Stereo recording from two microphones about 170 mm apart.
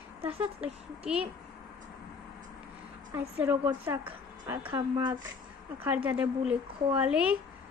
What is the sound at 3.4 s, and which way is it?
A woman's voice, 15° right (ahead or behind).